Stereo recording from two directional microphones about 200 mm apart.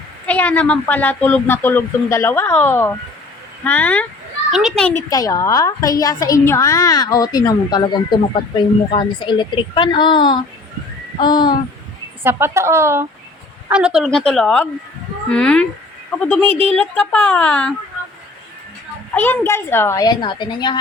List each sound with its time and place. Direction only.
0.3 s a woman's voice: 10° left (ahead or behind)
5.0 s a woman's voice: 15° left (ahead or behind)
12.2 s a woman's voice: 10° right (ahead or behind); by 17.7 s 5° left (ahead or behind)
19.1 s speech: 10° left (ahead or behind)